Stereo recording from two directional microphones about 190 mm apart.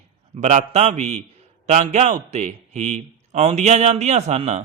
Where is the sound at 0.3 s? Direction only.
35° right (ahead or behind).